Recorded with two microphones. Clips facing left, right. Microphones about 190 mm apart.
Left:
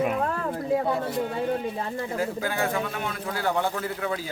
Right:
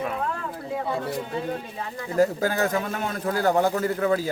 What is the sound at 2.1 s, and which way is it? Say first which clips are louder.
A man's voice: right 8 dB; 40° right (ahead or behind).